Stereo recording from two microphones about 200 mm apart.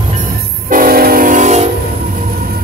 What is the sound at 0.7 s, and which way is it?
Train, 45° right (ahead or behind).